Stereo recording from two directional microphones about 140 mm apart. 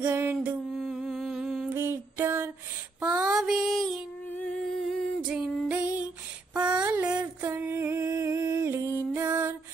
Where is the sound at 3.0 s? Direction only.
5° right (ahead or behind).